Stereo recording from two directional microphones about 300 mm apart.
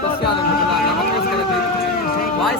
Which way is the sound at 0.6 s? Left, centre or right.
Left.